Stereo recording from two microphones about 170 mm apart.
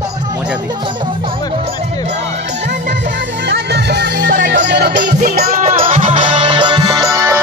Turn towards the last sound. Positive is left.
turn(degrees=-20)  # may be behind; listen again after turning